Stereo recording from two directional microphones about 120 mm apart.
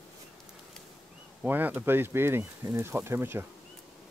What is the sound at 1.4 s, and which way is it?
Speech, 15° right (ahead or behind).